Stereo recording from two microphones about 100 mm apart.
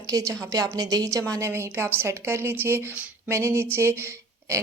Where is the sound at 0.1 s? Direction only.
35° right (ahead or behind).